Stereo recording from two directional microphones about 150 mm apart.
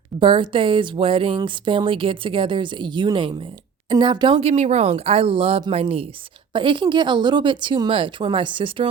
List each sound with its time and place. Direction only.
0.2 s speech: 35° right (ahead or behind)